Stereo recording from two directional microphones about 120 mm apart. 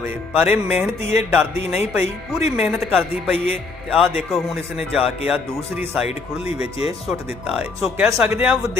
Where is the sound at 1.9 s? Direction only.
5° right (ahead or behind).